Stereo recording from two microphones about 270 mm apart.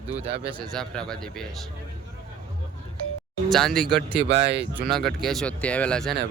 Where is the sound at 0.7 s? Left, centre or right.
Centre.